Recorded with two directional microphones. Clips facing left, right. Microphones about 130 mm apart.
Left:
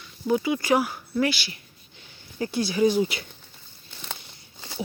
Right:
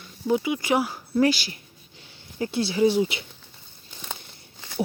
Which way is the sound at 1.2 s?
40° right (ahead or behind).